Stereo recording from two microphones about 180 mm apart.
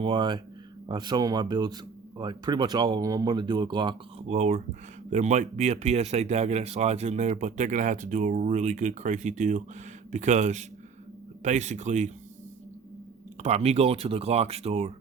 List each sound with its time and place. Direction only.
0.0 s speech: 25° right (ahead or behind)
4.3 s speech: 40° right (ahead or behind)
13.4 s speech: 35° right (ahead or behind)